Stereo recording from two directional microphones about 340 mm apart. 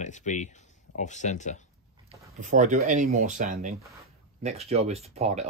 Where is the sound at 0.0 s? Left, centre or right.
Left.